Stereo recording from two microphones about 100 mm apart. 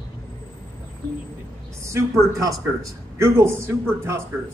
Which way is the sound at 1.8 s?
30° right (ahead or behind).